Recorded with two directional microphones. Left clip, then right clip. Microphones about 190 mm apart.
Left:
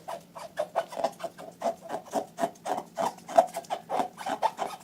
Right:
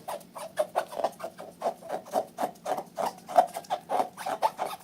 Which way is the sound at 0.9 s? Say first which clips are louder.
Even; 5° right (ahead or behind).